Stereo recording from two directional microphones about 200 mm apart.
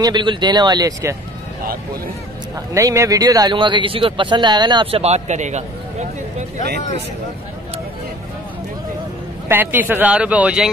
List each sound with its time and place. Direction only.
0.0 s speech: 20° right (ahead or behind)
2.7 s speech: 15° right (ahead or behind); by 6.0 s 35° right (ahead or behind)
9.5 s speech: 10° right (ahead or behind)